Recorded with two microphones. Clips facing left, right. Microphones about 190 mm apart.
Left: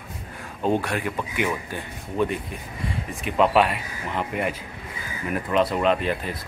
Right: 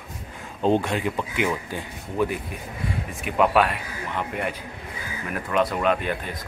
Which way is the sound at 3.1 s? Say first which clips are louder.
Left 1 dB; centre (ahead or behind).